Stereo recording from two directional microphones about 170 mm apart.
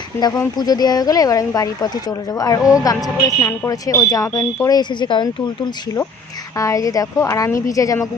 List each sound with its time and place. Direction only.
0.5 s speech: 25° left (ahead or behind)
6.6 s speech: 20° left (ahead or behind)